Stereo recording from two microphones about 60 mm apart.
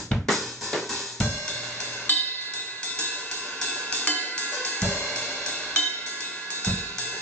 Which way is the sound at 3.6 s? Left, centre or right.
Left.